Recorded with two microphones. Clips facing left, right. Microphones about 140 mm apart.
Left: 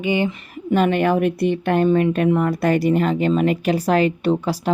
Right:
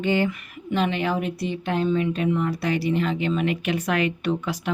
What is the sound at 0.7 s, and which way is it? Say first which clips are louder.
Speech: left 7 dB; 50° left (ahead or behind).